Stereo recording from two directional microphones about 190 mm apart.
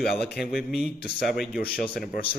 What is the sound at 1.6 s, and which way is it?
Speech, 55° left (ahead or behind).